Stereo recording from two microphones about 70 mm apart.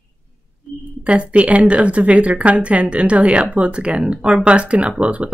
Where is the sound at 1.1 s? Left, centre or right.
Centre.